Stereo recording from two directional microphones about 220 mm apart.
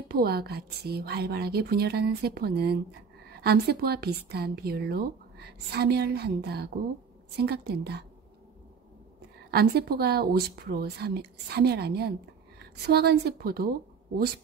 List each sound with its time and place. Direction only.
0.1 s a woman's voice: 45° right (ahead or behind)
9.5 s a woman's voice: 45° right (ahead or behind)